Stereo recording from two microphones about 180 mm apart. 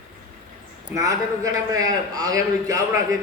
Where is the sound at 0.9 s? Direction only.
20° right (ahead or behind).